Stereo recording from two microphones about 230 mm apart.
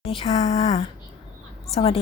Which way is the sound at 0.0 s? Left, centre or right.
Left.